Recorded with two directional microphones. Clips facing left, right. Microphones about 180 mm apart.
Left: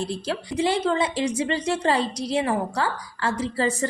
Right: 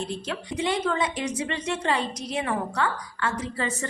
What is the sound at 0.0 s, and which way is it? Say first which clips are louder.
A woman's voice: left 3 dB; 35° left (ahead or behind).